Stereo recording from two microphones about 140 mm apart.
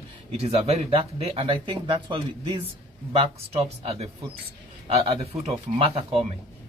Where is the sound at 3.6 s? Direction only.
45° right (ahead or behind).